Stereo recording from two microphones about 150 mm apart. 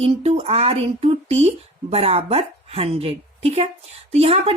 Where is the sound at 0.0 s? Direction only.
40° right (ahead or behind).